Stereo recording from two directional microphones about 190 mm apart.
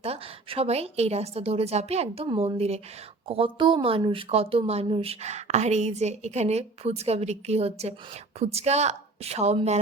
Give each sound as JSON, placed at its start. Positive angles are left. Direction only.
{"t": 0.0, "sound": "a woman's voice", "side_deg": -30}